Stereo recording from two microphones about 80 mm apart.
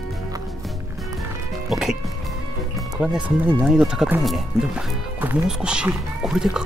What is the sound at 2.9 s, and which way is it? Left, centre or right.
Speech, centre.